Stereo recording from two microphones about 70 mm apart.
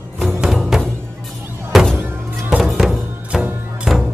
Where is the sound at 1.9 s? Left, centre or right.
Right.